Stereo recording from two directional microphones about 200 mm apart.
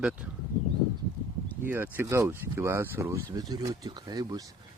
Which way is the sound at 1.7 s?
10° right (ahead or behind).